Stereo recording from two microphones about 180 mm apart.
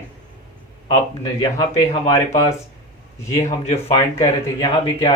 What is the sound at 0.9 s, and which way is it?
Speech, 20° left (ahead or behind).